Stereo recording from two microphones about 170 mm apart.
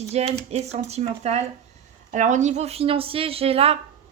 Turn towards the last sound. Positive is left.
turn(degrees=-35)  # may be behind; listen again after turning